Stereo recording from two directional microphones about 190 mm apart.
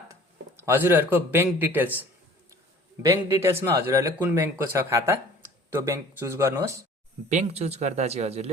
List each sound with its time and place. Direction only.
0.1 s speech: 15° right (ahead or behind)
3.0 s speech: 15° right (ahead or behind)
7.3 s a man's voice: 35° right (ahead or behind)